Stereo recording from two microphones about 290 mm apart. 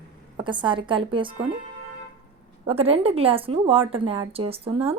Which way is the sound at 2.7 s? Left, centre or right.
Centre.